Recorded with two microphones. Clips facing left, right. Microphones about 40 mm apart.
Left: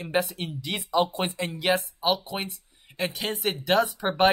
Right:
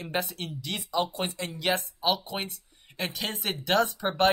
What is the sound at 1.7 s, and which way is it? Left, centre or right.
Speech, centre.